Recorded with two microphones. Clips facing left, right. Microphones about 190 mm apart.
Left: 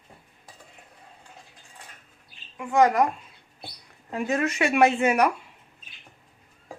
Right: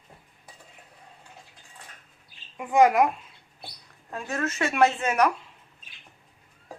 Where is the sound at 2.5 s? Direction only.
10° right (ahead or behind).